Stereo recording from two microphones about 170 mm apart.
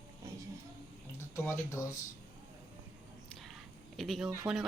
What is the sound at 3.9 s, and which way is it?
Speech, centre (ahead or behind).